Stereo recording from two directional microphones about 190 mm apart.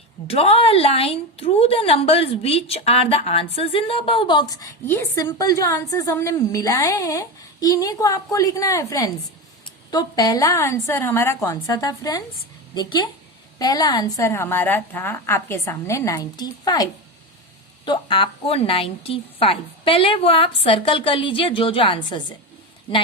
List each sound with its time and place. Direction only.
0.3 s a woman's voice: 30° left (ahead or behind)